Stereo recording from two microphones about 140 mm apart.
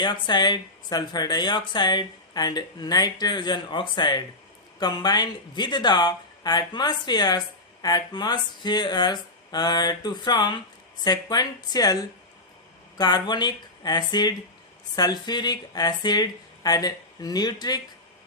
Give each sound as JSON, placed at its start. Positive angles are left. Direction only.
{"t": 0.0, "sound": "speech", "side_deg": 30}